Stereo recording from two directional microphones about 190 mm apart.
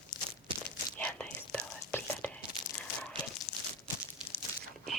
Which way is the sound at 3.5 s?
35° left (ahead or behind).